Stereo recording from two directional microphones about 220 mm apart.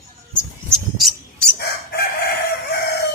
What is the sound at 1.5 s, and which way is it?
Chicken, 45° left (ahead or behind).